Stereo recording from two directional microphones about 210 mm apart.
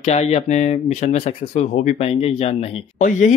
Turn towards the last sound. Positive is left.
turn(degrees=35)  # may be behind; listen again after turning